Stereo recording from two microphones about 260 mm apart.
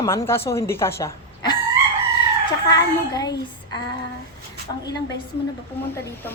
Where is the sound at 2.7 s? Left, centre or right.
Centre.